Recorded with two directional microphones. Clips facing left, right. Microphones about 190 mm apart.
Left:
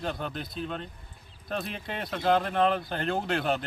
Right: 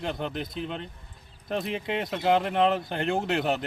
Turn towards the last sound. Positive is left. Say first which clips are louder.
# right 2 dB
turn(degrees=-20)  # may be behind; listen again after turning